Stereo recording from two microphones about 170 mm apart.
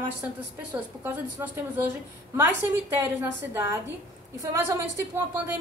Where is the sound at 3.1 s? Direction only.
15° right (ahead or behind).